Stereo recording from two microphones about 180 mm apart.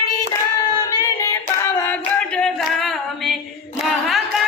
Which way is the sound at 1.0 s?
20° left (ahead or behind).